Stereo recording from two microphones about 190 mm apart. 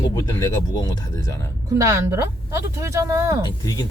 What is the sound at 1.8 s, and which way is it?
Speech, 15° right (ahead or behind).